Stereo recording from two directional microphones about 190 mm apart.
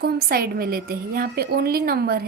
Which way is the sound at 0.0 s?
55° right (ahead or behind).